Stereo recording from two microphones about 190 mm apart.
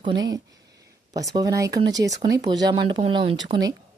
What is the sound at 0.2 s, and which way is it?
Speech, 20° right (ahead or behind).